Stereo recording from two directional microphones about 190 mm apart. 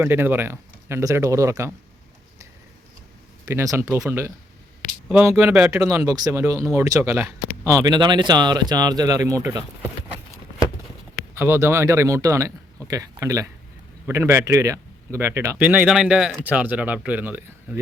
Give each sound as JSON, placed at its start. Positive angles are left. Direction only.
{"t": 0.0, "sound": "speech", "side_deg": -10}
{"t": 3.4, "sound": "speech", "side_deg": -15}
{"t": 11.3, "sound": "speech", "side_deg": -15}